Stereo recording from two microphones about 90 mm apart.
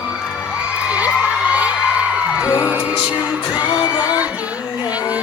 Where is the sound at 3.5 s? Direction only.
50° left (ahead or behind).